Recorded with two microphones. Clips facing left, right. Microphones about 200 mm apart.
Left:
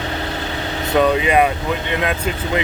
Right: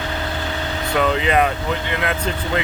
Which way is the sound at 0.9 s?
15° left (ahead or behind).